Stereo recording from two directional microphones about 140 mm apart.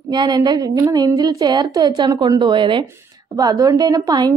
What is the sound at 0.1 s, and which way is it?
Speech, 30° right (ahead or behind).